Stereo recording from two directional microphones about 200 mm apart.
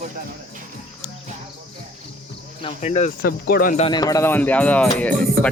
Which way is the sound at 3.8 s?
25° left (ahead or behind).